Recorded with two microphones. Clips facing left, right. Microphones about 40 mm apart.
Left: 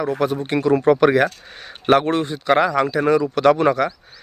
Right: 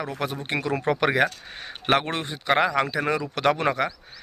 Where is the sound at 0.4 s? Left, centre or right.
Right.